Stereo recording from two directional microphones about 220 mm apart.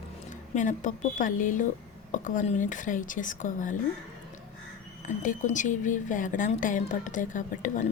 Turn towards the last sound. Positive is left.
turn(degrees=35)  # may be behind; listen again after turning